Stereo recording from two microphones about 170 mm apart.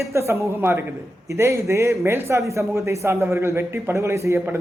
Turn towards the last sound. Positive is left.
turn(degrees=-15)  # may be behind; listen again after turning